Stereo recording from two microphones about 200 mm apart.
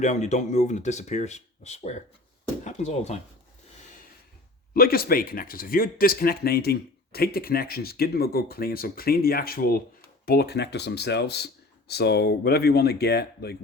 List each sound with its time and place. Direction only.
0.0 s speech: 35° left (ahead or behind)
4.7 s speech: 50° left (ahead or behind)